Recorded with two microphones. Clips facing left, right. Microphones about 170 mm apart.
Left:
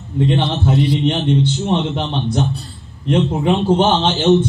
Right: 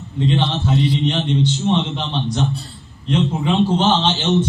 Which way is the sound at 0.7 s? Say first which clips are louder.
Left 3 dB; 55° left (ahead or behind).